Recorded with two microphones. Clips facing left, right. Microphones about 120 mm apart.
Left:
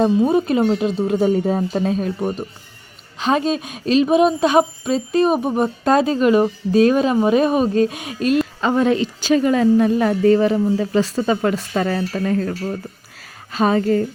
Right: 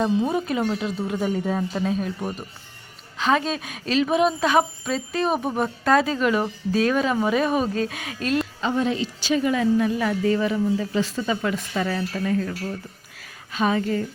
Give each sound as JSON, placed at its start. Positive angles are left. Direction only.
{"t": 0.3, "sound": "a woman's voice", "side_deg": 25}
{"t": 3.2, "sound": "a woman's voice", "side_deg": 20}
{"t": 8.6, "sound": "speech", "side_deg": 60}
{"t": 13.1, "sound": "a sound", "side_deg": 40}